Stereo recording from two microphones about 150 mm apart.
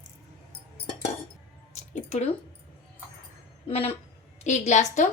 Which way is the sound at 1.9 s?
50° left (ahead or behind).